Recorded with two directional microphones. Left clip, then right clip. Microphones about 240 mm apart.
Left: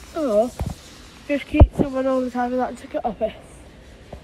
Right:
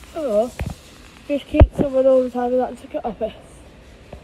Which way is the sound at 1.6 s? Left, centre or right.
Centre.